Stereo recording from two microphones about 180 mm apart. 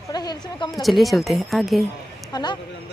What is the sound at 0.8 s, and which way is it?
Speech, centre (ahead or behind).